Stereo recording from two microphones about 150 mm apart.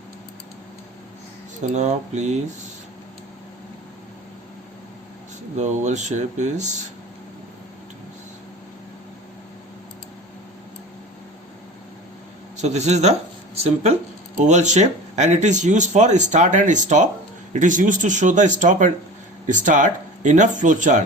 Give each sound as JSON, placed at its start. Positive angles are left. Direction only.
{"t": 1.7, "sound": "speech", "side_deg": -50}
{"t": 5.5, "sound": "speech", "side_deg": -50}
{"t": 12.5, "sound": "speech", "side_deg": -50}